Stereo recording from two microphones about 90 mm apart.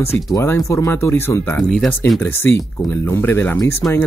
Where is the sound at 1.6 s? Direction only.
10° left (ahead or behind).